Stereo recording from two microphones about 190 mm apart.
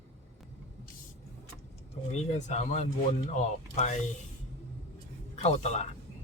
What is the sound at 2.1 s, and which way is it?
Speech, 40° left (ahead or behind).